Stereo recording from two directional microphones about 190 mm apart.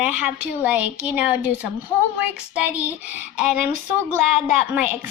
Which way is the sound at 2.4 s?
5° right (ahead or behind).